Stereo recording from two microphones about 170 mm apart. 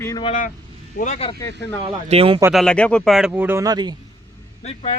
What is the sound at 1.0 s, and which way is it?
Speech, 40° left (ahead or behind).